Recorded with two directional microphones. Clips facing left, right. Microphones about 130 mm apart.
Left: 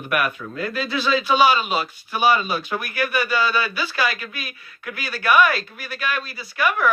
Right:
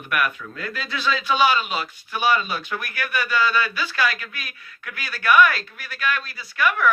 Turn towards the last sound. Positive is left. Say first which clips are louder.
# left 1 dB
turn(degrees=15)  # may be behind; listen again after turning